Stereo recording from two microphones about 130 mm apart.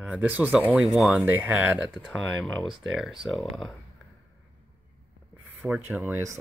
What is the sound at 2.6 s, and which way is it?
Speech, 5° right (ahead or behind).